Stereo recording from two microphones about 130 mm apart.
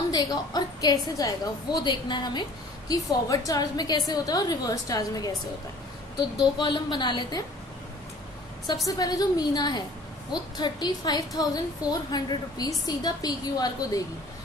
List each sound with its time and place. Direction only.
0.1 s a woman's voice: 30° left (ahead or behind)
6.3 s a woman's voice: 35° left (ahead or behind)
8.8 s a woman's voice: 30° left (ahead or behind)